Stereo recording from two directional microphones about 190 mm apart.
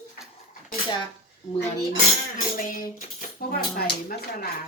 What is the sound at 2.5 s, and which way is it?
Speech, 45° left (ahead or behind).